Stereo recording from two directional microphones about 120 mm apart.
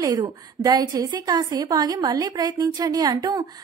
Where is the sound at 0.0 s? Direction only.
35° right (ahead or behind).